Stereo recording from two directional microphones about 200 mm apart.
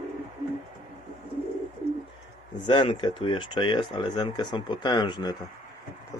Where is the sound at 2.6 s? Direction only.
25° left (ahead or behind).